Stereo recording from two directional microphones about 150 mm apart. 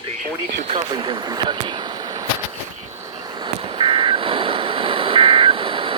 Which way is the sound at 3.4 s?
35° right (ahead or behind).